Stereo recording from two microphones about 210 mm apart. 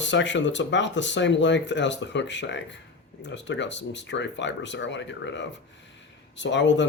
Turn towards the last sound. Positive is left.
turn(degrees=60)  # may be behind; listen again after turning